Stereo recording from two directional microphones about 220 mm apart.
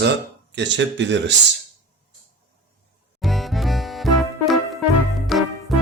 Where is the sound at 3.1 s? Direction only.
Centre (ahead or behind).